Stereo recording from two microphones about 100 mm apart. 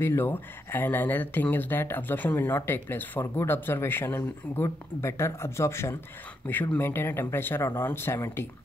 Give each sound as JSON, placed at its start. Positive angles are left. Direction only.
{"t": 0.0, "sound": "speech", "side_deg": 20}